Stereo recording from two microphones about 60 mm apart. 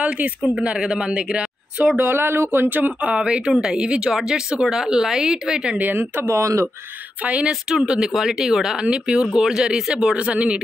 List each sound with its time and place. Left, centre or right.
0.6 s speech: centre
2.0 s speech: right; by 5.8 s centre
6.2 s speech: right
7.2 s speech: right